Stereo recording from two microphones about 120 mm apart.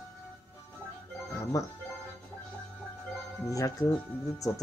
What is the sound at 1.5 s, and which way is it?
Speech, 30° left (ahead or behind).